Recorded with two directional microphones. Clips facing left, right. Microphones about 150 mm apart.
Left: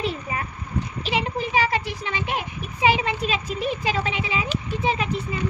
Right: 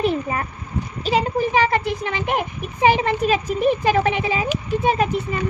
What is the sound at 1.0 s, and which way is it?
A child's voice, 40° right (ahead or behind).